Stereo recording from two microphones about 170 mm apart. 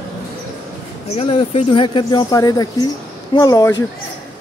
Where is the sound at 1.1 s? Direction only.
35° left (ahead or behind).